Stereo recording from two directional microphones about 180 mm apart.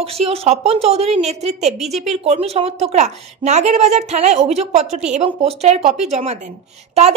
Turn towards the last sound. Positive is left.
turn(degrees=-35)  # may be behind; listen again after turning